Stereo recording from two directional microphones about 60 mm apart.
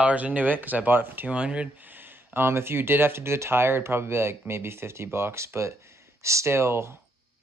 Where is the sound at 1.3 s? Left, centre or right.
Centre.